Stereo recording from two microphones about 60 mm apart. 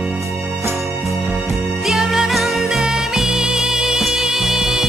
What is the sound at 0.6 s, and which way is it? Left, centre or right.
Music, right.